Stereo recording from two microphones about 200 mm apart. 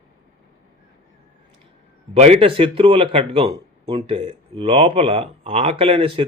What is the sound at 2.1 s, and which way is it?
Speech, 30° right (ahead or behind).